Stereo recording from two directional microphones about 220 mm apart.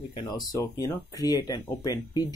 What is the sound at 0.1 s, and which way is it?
Speech, 20° left (ahead or behind).